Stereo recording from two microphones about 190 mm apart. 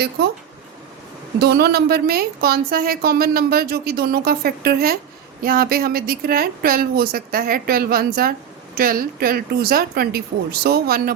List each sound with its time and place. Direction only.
1.4 s speech: 55° right (ahead or behind)